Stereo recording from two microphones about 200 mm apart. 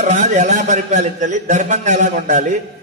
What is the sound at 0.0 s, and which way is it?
A man's voice, 35° right (ahead or behind).